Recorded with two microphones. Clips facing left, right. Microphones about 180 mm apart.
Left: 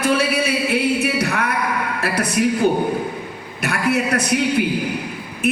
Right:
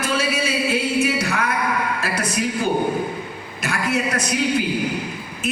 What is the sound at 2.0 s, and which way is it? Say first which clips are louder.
A woman's voice: left 4 dB; 65° left (ahead or behind).